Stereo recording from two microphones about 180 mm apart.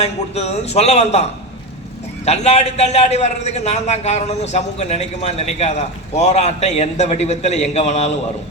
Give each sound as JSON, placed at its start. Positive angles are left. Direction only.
{"t": 0.0, "sound": "a man's voice", "side_deg": 35}